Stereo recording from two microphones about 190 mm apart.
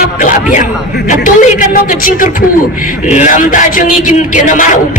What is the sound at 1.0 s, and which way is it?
A man's voice, 45° left (ahead or behind).